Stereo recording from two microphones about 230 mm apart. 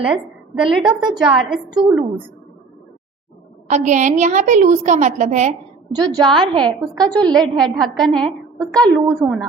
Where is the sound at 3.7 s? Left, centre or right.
Right.